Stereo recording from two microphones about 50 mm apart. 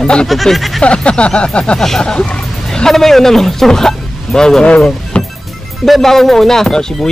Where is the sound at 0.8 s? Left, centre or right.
Left.